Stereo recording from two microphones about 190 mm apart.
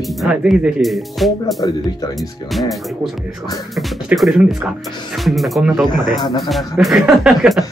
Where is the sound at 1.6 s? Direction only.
20° left (ahead or behind).